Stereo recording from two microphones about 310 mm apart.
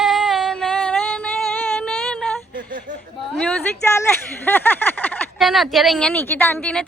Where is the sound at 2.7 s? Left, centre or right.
Right.